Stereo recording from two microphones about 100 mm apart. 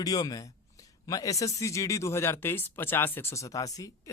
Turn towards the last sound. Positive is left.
turn(degrees=35)  # may be behind; listen again after turning